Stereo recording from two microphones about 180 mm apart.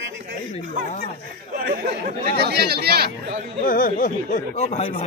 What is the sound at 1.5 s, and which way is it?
Speech, 60° right (ahead or behind).